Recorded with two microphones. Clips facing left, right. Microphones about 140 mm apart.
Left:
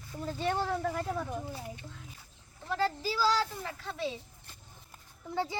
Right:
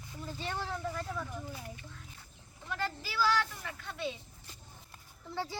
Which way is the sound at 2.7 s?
35° left (ahead or behind).